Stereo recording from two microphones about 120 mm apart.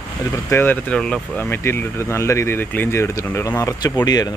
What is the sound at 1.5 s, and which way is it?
Speech, 20° left (ahead or behind).